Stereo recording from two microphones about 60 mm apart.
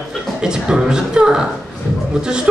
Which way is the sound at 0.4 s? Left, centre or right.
Centre.